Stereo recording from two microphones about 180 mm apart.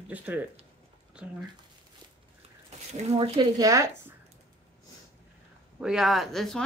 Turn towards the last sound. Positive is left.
turn(degrees=0)  # may be behind; listen again after turning